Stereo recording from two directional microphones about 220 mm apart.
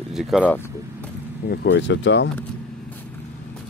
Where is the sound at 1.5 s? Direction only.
55° left (ahead or behind).